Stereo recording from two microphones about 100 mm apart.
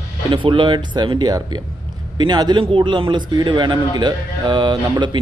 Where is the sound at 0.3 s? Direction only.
55° right (ahead or behind).